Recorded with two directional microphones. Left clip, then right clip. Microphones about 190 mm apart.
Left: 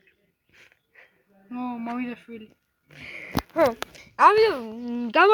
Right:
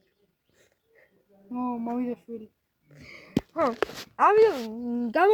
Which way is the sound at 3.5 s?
5° left (ahead or behind).